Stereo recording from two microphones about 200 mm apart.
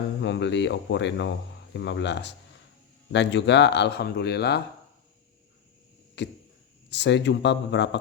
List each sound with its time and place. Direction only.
0.2 s speech: 60° left (ahead or behind)
6.2 s speech: 60° left (ahead or behind)